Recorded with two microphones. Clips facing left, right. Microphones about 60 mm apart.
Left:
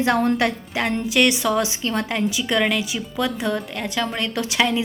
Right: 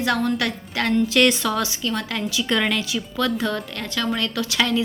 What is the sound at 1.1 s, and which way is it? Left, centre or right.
Speech, centre.